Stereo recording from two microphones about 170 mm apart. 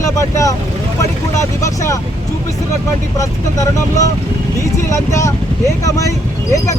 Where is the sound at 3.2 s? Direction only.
20° left (ahead or behind).